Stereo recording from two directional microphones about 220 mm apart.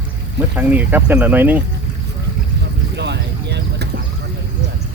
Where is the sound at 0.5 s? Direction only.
10° right (ahead or behind).